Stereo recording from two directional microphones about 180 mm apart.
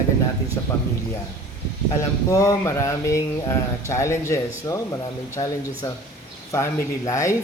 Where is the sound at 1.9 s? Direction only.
15° left (ahead or behind).